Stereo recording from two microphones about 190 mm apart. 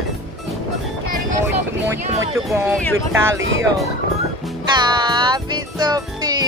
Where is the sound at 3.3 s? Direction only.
85° right.